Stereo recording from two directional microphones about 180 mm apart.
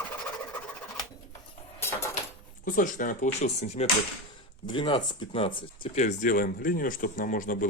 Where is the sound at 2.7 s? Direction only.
45° left (ahead or behind); by 5.9 s 30° left (ahead or behind).